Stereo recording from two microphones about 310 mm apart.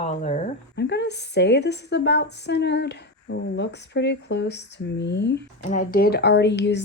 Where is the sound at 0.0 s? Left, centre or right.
Left.